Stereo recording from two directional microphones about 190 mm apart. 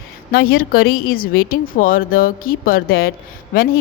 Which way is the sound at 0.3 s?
50° left (ahead or behind).